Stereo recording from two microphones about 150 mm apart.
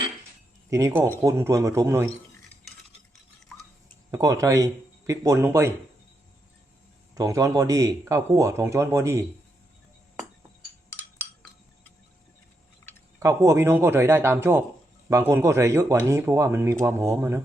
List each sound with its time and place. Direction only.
0.7 s speech: 20° right (ahead or behind)
4.1 s speech: 25° right (ahead or behind)
7.1 s speech: 20° right (ahead or behind)
13.1 s a man's voice: 20° right (ahead or behind)